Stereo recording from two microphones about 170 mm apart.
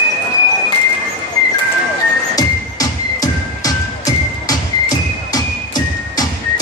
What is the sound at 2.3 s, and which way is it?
Music, 20° left (ahead or behind).